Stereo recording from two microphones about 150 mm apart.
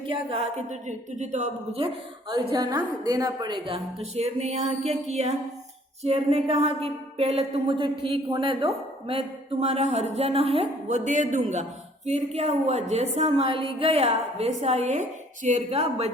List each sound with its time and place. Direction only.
0.1 s a woman's voice: 40° right (ahead or behind)
2.3 s a woman's voice: 25° right (ahead or behind)
4.0 s a woman's voice: 45° right (ahead or behind)